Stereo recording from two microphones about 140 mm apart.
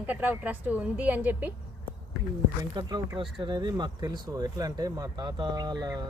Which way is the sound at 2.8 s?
30° right (ahead or behind).